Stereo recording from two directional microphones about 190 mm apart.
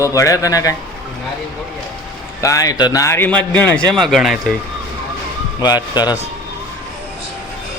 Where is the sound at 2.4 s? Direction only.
15° left (ahead or behind); by 4.5 s centre (ahead or behind).